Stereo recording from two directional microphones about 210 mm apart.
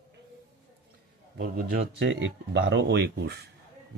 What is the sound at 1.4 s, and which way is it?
Speech, 45° right (ahead or behind).